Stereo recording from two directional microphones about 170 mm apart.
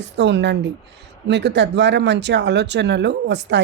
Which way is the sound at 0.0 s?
90° right.